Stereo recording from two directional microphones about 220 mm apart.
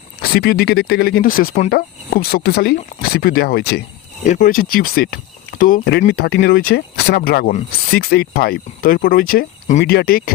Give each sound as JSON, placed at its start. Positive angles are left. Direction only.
{"t": 0.2, "sound": "speech", "side_deg": 45}
{"t": 4.3, "sound": "speech", "side_deg": 35}